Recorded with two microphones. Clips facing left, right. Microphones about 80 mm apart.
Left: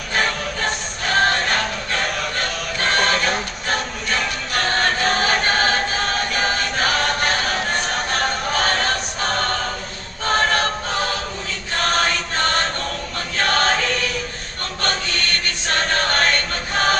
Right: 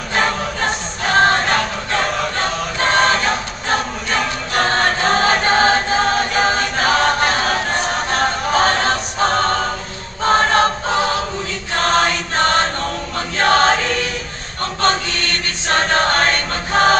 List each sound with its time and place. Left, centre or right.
0.1 s choir: right
11.9 s chant: right
15.7 s chant: right